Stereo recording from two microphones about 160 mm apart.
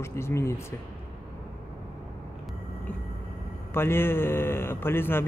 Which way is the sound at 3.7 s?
15° left (ahead or behind).